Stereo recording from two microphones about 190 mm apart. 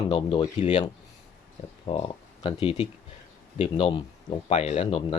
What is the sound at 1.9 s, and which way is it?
Speech, 25° left (ahead or behind).